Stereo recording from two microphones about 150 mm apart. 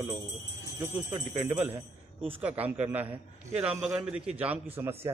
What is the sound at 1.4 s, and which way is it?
Speech, 15° right (ahead or behind).